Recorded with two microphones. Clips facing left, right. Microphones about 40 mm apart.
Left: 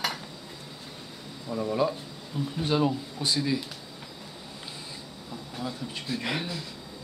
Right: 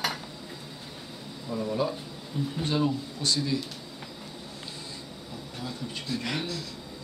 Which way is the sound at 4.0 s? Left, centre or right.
Centre.